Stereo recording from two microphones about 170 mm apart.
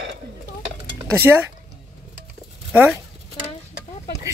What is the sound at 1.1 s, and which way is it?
Speech, 10° right (ahead or behind).